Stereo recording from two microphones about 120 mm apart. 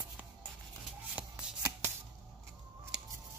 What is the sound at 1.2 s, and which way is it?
Shuffling cards, 10° right (ahead or behind).